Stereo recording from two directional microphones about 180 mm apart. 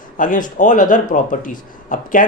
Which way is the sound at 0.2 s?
45° left (ahead or behind).